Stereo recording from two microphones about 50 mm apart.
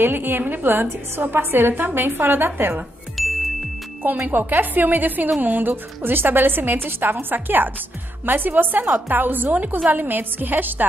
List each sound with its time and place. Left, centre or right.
0.0 s a woman's voice: right
3.2 s music: centre
4.3 s a woman's voice: right